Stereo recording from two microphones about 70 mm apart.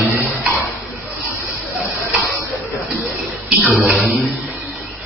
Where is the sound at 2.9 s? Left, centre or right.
Centre.